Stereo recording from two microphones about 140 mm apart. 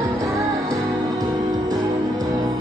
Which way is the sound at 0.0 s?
25° right (ahead or behind).